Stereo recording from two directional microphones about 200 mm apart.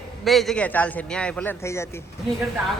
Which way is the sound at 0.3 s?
Centre (ahead or behind).